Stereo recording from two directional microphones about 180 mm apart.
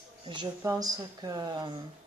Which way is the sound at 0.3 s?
25° right (ahead or behind).